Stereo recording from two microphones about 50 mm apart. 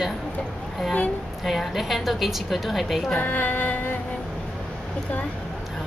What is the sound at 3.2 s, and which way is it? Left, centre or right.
Speech, left.